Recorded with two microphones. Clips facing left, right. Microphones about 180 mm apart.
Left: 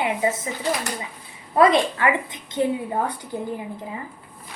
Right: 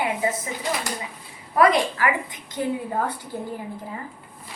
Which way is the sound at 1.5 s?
25° left (ahead or behind).